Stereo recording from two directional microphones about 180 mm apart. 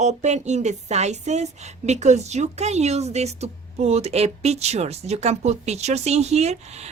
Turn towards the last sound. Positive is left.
turn(degrees=-35)  # may be behind; listen again after turning